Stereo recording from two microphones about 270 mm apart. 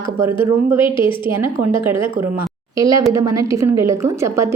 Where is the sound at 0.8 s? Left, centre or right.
Centre.